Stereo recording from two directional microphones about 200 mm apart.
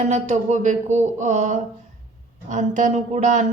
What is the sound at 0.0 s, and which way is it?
A woman's voice, 35° right (ahead or behind).